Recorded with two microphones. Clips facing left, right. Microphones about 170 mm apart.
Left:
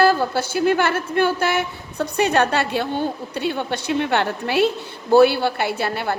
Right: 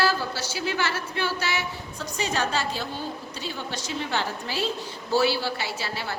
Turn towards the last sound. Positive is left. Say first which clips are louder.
# left 9 dB
turn(degrees=60)  # may be behind; listen again after turning